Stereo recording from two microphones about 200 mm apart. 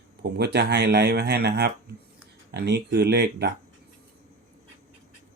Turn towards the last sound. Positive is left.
turn(degrees=-55)  # may be behind; listen again after turning